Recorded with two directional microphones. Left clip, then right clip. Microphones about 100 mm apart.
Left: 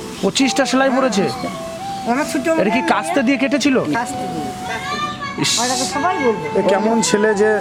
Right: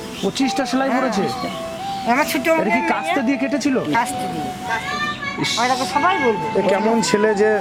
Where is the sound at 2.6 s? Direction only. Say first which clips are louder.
Left 2 dB; 40° left (ahead or behind).